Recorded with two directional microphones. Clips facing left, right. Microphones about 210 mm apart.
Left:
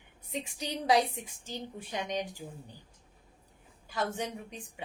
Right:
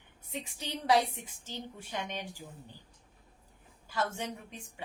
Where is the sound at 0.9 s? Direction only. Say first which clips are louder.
Left 1 dB; 15° left (ahead or behind).